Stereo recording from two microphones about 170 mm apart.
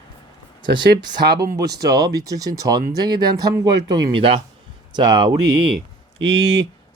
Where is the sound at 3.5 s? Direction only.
25° right (ahead or behind).